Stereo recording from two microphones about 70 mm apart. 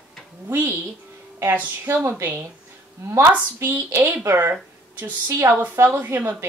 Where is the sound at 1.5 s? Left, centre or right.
Right.